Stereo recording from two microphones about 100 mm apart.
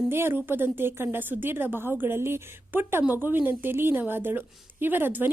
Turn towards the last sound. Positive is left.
turn(degrees=-20)  # may be behind; listen again after turning